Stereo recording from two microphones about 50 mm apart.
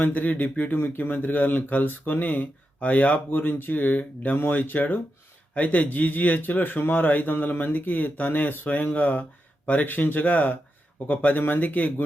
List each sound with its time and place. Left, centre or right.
0.0 s speech: left